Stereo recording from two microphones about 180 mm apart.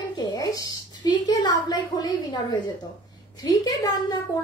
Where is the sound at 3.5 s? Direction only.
20° left (ahead or behind).